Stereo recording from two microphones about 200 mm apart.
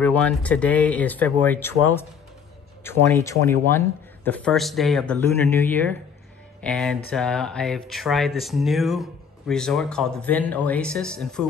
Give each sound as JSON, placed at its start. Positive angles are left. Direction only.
{"t": 0.0, "sound": "speech", "side_deg": 5}